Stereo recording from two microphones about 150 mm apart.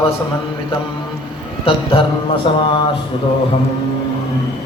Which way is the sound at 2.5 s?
35° left (ahead or behind).